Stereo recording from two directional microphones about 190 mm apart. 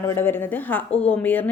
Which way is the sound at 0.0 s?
10° left (ahead or behind).